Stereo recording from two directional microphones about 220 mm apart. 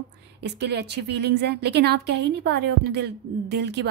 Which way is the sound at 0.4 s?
50° right (ahead or behind).